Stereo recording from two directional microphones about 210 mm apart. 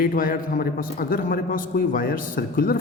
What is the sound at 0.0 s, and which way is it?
A man's voice, 40° left (ahead or behind).